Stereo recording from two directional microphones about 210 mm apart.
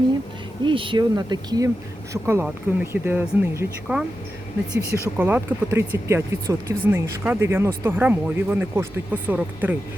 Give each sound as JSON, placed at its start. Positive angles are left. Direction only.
{"t": 0.6, "sound": "speech", "side_deg": -25}